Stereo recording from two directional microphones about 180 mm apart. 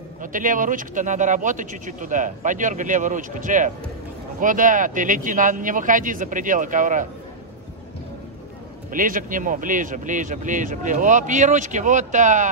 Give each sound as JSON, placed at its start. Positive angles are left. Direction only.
{"t": 0.2, "sound": "speech", "side_deg": -45}
{"t": 8.9, "sound": "speech", "side_deg": -50}